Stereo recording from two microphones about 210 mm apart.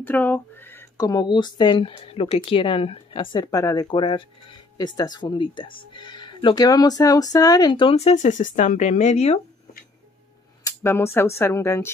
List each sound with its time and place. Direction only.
0.0 s speech: 10° left (ahead or behind); by 9.4 s 30° left (ahead or behind)
10.6 s speech: 10° left (ahead or behind)